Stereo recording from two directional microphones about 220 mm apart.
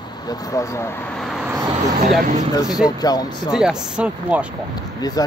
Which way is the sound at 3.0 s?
15° left (ahead or behind).